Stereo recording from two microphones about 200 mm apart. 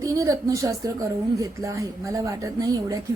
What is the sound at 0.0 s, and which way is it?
A woman's voice, 15° right (ahead or behind).